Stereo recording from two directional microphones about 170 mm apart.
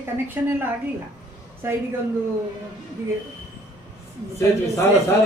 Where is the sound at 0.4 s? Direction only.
10° right (ahead or behind).